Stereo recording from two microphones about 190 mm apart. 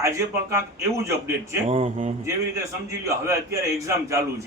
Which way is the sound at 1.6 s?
30° right (ahead or behind).